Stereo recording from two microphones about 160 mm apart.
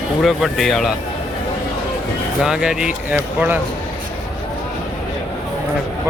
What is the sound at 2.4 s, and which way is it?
Speech, 5° right (ahead or behind).